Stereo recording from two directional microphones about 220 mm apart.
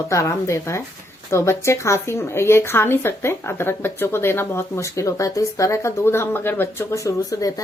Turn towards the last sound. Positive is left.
turn(degrees=15)  # may be behind; listen again after turning